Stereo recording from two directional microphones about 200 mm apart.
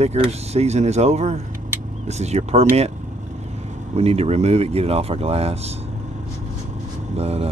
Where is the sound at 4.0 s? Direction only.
30° right (ahead or behind).